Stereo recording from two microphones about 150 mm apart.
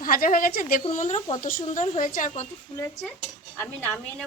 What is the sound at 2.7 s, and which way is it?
Speech, 30° left (ahead or behind).